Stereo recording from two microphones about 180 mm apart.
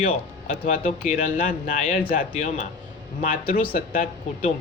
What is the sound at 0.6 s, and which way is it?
A man's voice, 40° left (ahead or behind).